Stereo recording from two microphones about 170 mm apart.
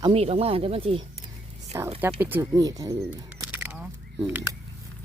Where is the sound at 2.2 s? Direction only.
15° right (ahead or behind).